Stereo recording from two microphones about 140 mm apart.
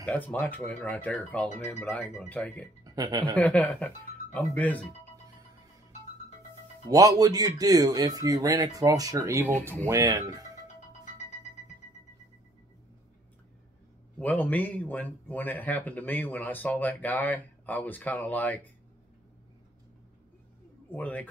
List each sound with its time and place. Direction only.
0.0 s speech: 10° left (ahead or behind)
2.8 s speech: 30° right (ahead or behind)
3.3 s speech: 10° left (ahead or behind)
6.9 s speech: 25° right (ahead or behind)
14.1 s speech: 10° left (ahead or behind)
20.9 s speech: 10° left (ahead or behind)